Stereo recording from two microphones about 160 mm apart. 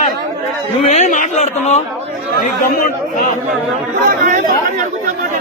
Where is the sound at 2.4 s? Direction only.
55° left (ahead or behind).